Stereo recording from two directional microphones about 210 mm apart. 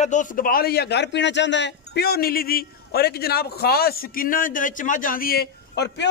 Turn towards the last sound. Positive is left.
turn(degrees=50)  # may be behind; listen again after turning